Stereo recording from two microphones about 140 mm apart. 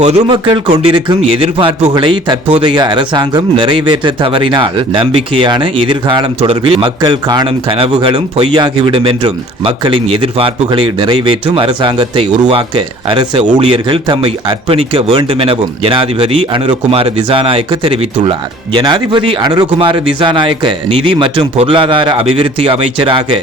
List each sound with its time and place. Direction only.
0.3 s speech: 35° right (ahead or behind)